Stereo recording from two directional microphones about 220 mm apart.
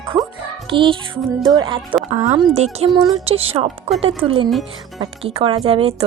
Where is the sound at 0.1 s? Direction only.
20° right (ahead or behind).